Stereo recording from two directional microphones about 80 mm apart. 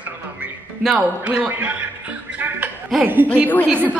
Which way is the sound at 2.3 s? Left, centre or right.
Right.